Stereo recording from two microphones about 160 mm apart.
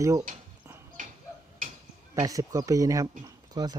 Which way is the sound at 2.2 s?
20° right (ahead or behind).